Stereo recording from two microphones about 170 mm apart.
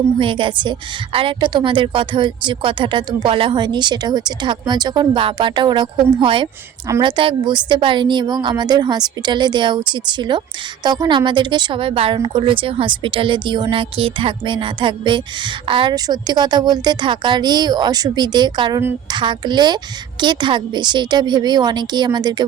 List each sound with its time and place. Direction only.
0.2 s a woman's voice: 30° right (ahead or behind)
6.8 s a woman's voice: 20° right (ahead or behind)